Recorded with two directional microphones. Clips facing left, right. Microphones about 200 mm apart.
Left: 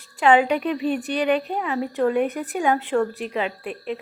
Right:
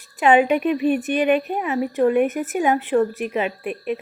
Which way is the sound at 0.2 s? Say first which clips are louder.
Right 2 dB; 20° right (ahead or behind).